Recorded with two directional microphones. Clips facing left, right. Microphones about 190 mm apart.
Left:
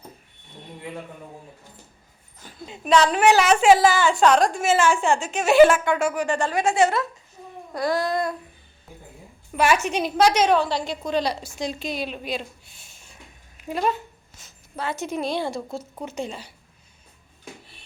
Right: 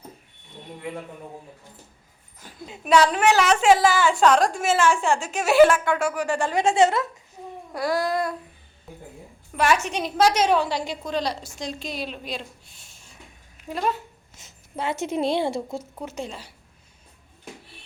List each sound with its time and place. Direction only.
2.6 s a sound: 5° right (ahead or behind)
3.2 s a woman's voice: 10° left (ahead or behind); by 6.5 s 5° right (ahead or behind)
6.5 s a woman's voice: 20° right (ahead or behind)
7.7 s a sound: 10° right (ahead or behind)
9.6 s a woman's voice: centre (ahead or behind)
10.6 s a sound: 15° right (ahead or behind)
11.0 s a woman's voice: centre (ahead or behind)
14.3 s speech: 20° right (ahead or behind)
15.8 s a woman's voice: 5° right (ahead or behind)